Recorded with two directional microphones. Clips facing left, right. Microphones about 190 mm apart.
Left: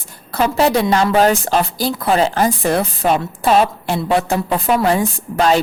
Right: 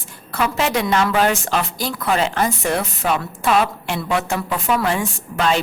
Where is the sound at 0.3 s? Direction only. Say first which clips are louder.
Left 5 dB; 35° left (ahead or behind).